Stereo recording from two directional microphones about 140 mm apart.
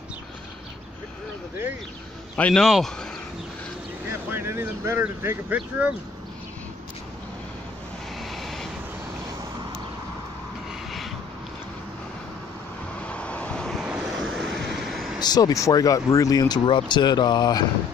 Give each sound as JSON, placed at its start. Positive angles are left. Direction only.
{"t": 2.3, "sound": "a man's voice", "side_deg": 5}
{"t": 4.3, "sound": "speech", "side_deg": -15}
{"t": 8.2, "sound": "vehicle", "side_deg": 0}
{"t": 13.0, "sound": "vehicle", "side_deg": 10}
{"t": 15.1, "sound": "speech", "side_deg": 30}